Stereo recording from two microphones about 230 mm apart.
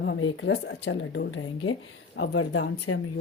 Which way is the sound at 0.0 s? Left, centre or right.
Left.